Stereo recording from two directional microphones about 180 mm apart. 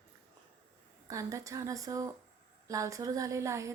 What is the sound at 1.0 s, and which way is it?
A woman's voice, 20° right (ahead or behind).